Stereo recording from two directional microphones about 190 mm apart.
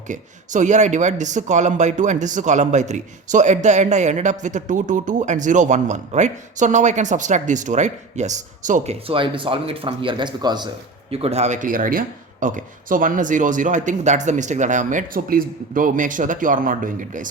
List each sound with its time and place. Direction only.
0.1 s speech: 40° right (ahead or behind)